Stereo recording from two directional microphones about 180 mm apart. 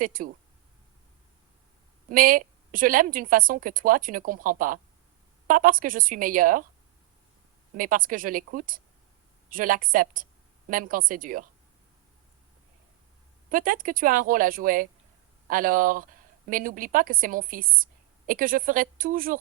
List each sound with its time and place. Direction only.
0.0 s a woman's voice: 50° right (ahead or behind)
2.0 s a woman's voice: 50° right (ahead or behind)
7.8 s a woman's voice: 50° right (ahead or behind)
13.5 s a woman's voice: 50° right (ahead or behind)